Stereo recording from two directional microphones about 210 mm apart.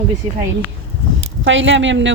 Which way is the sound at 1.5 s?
65° right (ahead or behind).